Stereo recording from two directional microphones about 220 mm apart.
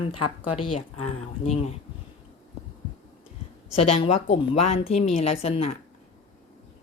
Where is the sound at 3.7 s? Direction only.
25° left (ahead or behind).